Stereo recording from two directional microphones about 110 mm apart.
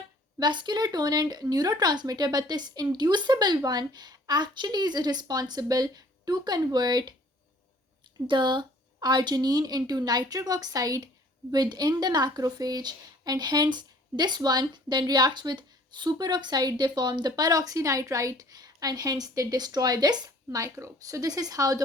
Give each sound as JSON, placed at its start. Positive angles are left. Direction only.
{"t": 0.3, "sound": "a woman's voice", "side_deg": -45}
{"t": 8.3, "sound": "a woman's voice", "side_deg": -45}